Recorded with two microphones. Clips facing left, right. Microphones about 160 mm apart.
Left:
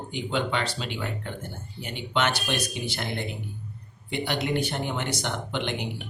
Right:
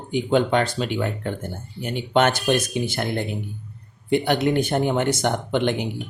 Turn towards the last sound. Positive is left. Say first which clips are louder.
# right 9 dB
turn(degrees=-50)  # may be behind; listen again after turning